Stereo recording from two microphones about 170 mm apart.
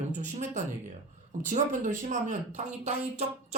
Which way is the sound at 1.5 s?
45° right (ahead or behind).